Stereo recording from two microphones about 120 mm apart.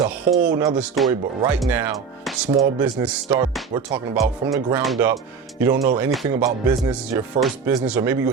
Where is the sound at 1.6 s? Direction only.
15° right (ahead or behind).